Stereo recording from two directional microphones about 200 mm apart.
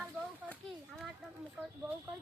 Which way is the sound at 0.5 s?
Centre (ahead or behind).